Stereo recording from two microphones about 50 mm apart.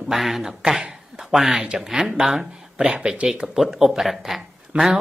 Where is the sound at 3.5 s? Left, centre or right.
Centre.